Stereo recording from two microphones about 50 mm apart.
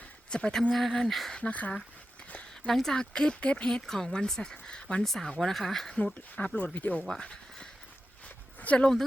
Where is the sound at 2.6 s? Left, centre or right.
Centre.